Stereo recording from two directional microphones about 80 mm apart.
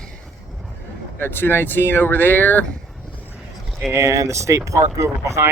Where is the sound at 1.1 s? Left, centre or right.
Left.